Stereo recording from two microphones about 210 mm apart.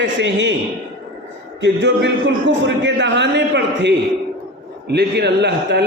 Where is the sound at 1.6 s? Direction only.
55° right (ahead or behind).